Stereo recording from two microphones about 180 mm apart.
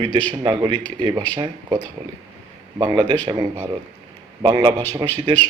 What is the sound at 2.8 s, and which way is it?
Speech, 25° right (ahead or behind).